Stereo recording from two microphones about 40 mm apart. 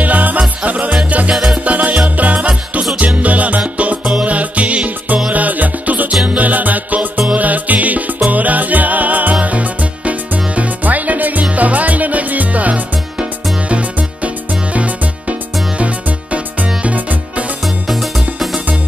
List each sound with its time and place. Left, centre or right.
0.0 s music: right
1.3 s music: centre
1.6 s music: right
4.0 s music: right
4.3 s music: right
17.8 s music: centre